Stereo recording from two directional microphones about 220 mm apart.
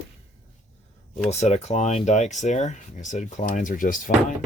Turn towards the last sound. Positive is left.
turn(degrees=35)  # may be behind; listen again after turning